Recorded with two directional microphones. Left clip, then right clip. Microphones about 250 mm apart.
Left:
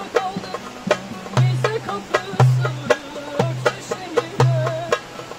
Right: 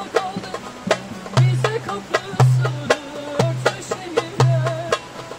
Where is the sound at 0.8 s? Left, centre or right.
Centre.